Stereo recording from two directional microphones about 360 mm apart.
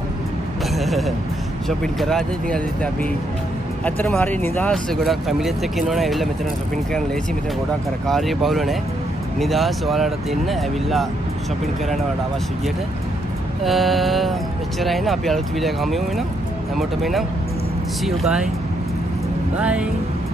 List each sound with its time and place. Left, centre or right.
0.7 s music: centre
1.7 s speech: centre
8.1 s speech: centre
13.7 s speech: centre
19.6 s speech: centre